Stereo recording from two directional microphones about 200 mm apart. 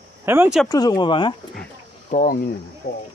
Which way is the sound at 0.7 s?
20° left (ahead or behind).